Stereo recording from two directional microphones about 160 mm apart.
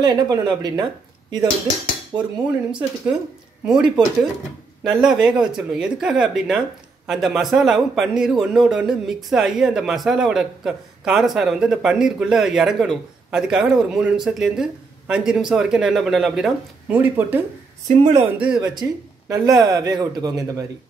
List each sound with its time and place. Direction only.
0.0 s speech: 25° right (ahead or behind)
2.1 s speech: 5° right (ahead or behind)
18.8 s speech: 20° right (ahead or behind)